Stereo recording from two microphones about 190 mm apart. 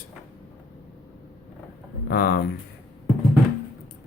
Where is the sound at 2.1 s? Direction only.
55° left (ahead or behind).